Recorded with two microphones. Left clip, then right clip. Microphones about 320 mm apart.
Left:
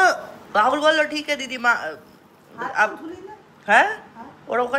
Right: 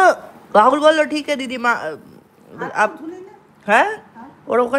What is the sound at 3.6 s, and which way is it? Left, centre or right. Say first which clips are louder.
Speech: right 1 dB; centre.